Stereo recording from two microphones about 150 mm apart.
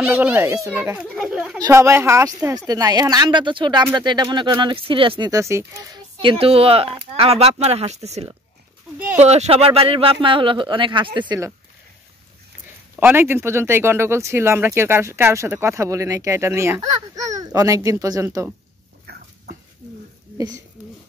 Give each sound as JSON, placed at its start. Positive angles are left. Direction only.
{"t": 0.0, "sound": "speech", "side_deg": -10}
{"t": 1.1, "sound": "speech", "side_deg": 0}
{"t": 1.6, "sound": "speech", "side_deg": -20}
{"t": 5.3, "sound": "speech", "side_deg": -20}
{"t": 6.2, "sound": "speech", "side_deg": -40}
{"t": 13.0, "sound": "speech", "side_deg": -15}